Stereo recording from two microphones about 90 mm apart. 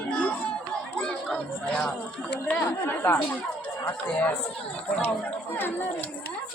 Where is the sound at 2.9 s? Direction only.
25° left (ahead or behind).